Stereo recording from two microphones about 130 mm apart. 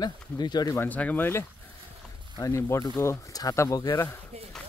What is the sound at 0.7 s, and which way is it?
Speech, 15° left (ahead or behind).